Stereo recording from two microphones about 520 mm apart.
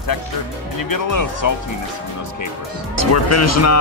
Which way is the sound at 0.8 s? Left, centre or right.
Left.